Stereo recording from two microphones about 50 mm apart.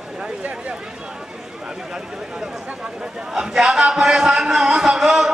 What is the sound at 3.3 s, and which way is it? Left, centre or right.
A man's voice, centre.